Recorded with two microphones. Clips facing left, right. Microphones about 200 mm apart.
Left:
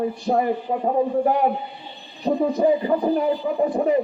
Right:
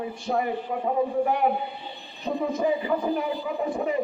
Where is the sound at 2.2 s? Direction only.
35° left (ahead or behind).